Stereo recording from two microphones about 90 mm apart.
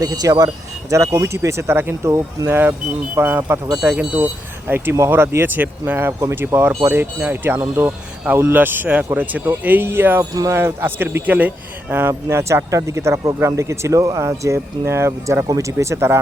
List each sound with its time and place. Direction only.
0.0 s speech: 45° right (ahead or behind)
3.2 s speech: 25° right (ahead or behind)
4.7 s speech: 25° right (ahead or behind)